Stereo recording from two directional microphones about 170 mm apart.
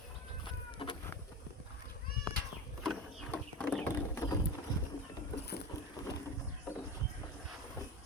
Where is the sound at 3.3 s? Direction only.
5° left (ahead or behind).